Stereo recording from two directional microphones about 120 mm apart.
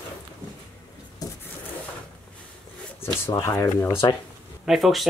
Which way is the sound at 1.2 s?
30° left (ahead or behind).